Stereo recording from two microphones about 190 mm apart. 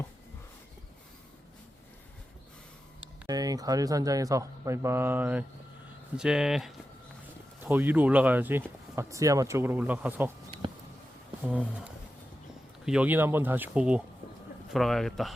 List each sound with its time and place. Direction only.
3.2 s a man's voice: 20° right (ahead or behind)
11.4 s a man's voice: 5° right (ahead or behind)
12.8 s a man's voice: 5° right (ahead or behind)